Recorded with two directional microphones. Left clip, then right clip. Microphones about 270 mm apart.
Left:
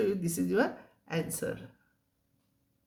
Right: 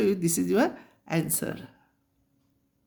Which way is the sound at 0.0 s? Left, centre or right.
Right.